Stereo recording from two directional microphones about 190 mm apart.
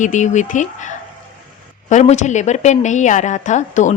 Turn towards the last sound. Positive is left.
turn(degrees=40)  # may be behind; listen again after turning